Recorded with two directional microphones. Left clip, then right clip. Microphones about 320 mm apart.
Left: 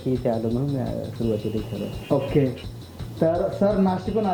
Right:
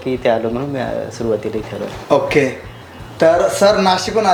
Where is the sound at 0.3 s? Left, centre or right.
Centre.